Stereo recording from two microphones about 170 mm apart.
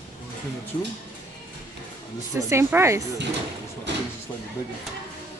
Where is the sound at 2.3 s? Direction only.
15° right (ahead or behind).